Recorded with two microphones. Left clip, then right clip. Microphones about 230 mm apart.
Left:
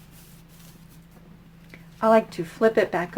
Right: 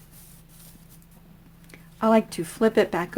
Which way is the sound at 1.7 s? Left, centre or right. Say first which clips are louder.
Left 2 dB; right.